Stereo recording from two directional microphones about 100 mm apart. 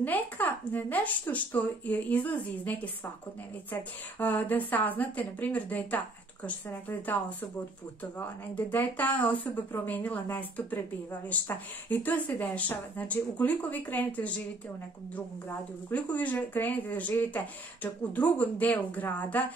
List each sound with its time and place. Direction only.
0.0 s a woman's voice: 15° left (ahead or behind)
15.9 s a woman's voice: 15° left (ahead or behind)